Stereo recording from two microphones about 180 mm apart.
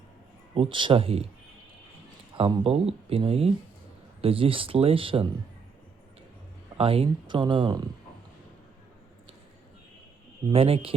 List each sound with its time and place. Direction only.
0.5 s speech: 30° right (ahead or behind)
2.3 s speech: 30° right (ahead or behind)
6.7 s speech: 30° right (ahead or behind)
10.5 s speech: 30° right (ahead or behind)